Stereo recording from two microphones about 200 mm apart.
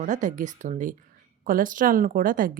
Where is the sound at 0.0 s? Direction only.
40° right (ahead or behind).